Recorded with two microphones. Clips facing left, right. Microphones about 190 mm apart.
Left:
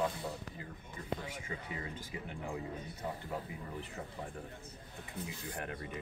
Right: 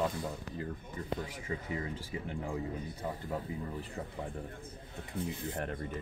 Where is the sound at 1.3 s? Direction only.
35° right (ahead or behind).